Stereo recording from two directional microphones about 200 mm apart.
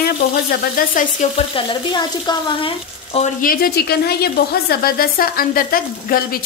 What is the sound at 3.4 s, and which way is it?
A woman's voice, 50° left (ahead or behind).